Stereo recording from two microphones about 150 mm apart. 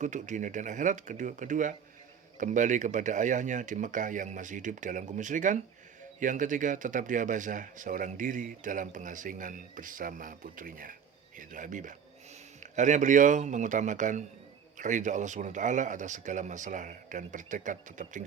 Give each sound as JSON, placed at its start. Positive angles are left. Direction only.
{"t": 0.0, "sound": "speech", "side_deg": -55}